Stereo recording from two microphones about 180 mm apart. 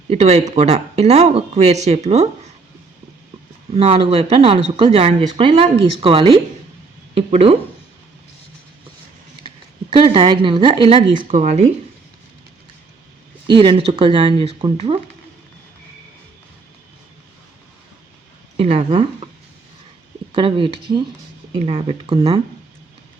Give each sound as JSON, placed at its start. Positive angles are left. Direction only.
{"t": 0.1, "sound": "speech", "side_deg": -35}
{"t": 3.8, "sound": "speech", "side_deg": -35}
{"t": 9.9, "sound": "speech", "side_deg": -30}
{"t": 11.1, "sound": "speech", "side_deg": -45}
{"t": 13.5, "sound": "speech", "side_deg": -30}
{"t": 18.5, "sound": "speech", "side_deg": -30}
{"t": 20.3, "sound": "speech", "side_deg": -30}